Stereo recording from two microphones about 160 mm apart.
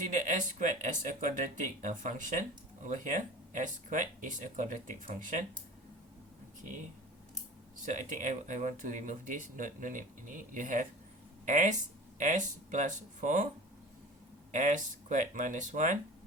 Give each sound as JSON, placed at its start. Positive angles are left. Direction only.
{"t": 0.0, "sound": "speech", "side_deg": -55}
{"t": 7.9, "sound": "speech", "side_deg": -50}
{"t": 14.5, "sound": "speech", "side_deg": -50}